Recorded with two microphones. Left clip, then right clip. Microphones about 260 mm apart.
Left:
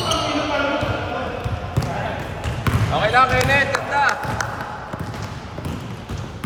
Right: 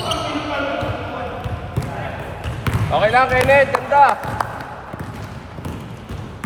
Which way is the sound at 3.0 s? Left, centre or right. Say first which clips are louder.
Right 2 dB; right.